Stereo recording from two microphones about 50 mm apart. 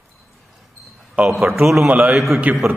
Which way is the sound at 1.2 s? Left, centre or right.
Right.